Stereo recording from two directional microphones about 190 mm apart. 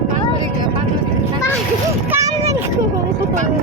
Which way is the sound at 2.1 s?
15° right (ahead or behind).